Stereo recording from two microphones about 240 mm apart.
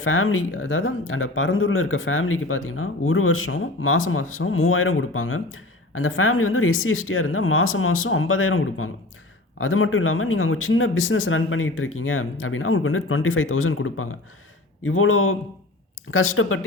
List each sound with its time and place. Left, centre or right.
0.0 s speech: left